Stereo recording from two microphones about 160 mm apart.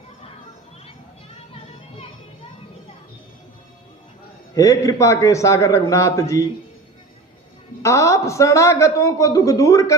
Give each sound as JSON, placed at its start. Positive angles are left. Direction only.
{"t": 4.5, "sound": "a man's voice", "side_deg": 20}
{"t": 7.8, "sound": "a man's voice", "side_deg": 20}